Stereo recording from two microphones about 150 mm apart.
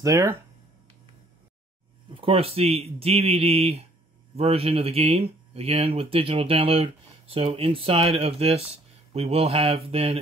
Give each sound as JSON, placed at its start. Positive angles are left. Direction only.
{"t": 0.0, "sound": "speech", "side_deg": -20}
{"t": 2.1, "sound": "speech", "side_deg": -35}